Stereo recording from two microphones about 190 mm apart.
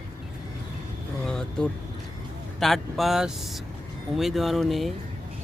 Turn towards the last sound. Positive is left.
turn(degrees=0)  # may be behind; listen again after turning